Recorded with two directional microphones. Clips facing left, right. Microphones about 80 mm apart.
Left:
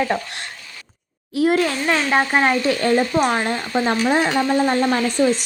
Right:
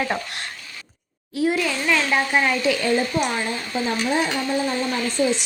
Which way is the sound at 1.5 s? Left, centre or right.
Left.